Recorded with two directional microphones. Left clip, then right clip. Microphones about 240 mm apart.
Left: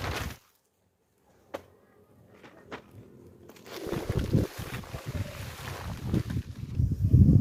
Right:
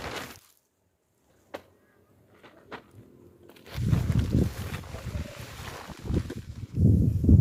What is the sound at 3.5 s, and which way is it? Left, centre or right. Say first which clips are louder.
Biting: left 2 dB; centre.